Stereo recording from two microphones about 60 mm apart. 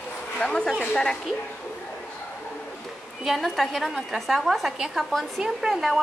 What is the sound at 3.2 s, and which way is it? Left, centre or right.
A woman's voice, centre.